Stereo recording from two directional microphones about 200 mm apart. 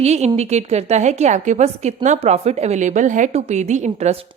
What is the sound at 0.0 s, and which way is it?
A woman's voice, 35° right (ahead or behind).